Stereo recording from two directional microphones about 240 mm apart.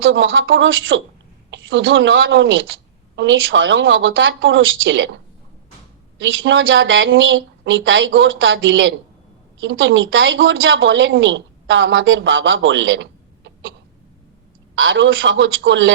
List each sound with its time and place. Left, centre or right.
0.0 s a woman's voice: right
14.8 s a woman's voice: right